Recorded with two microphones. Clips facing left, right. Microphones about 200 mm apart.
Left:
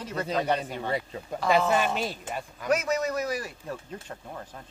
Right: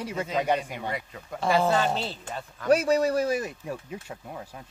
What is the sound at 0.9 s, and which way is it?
Speech, 30° left (ahead or behind).